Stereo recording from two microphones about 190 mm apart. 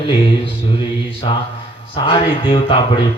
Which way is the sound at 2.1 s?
25° left (ahead or behind).